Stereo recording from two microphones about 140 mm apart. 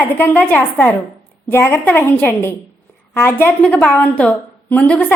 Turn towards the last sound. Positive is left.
turn(degrees=10)  # may be behind; listen again after turning